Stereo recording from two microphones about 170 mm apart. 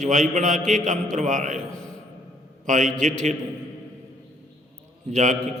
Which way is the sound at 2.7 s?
45° right (ahead or behind).